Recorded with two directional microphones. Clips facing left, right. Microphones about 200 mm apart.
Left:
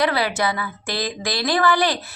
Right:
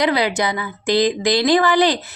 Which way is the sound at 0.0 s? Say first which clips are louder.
Right 3 dB; 15° right (ahead or behind).